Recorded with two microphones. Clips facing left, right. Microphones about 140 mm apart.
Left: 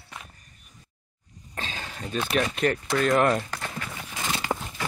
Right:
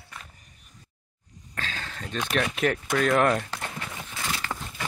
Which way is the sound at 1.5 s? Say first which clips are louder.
Even; 20° left (ahead or behind).